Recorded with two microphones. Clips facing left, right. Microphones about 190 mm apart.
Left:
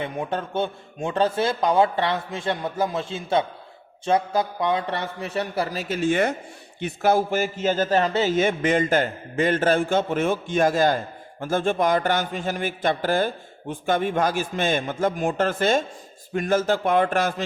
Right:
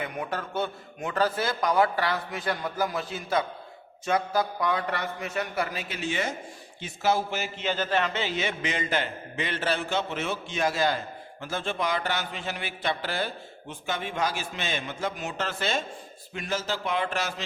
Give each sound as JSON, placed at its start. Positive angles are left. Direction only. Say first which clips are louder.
{"t": 0.0, "sound": "a man's voice", "louder": "left 5 dB", "side_deg": 25}